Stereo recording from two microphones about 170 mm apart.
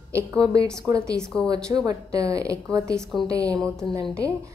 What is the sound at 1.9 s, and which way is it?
A woman's voice, 20° right (ahead or behind).